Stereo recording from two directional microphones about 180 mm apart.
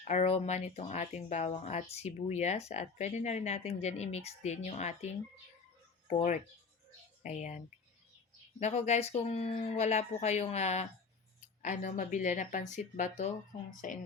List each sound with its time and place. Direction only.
0.1 s speech: 40° left (ahead or behind)
6.1 s speech: 45° left (ahead or behind)